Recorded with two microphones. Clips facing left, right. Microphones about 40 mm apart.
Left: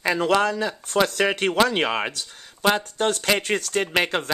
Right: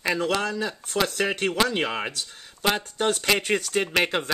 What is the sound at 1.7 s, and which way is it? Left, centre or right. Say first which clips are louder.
Speech: left 3 dB; left.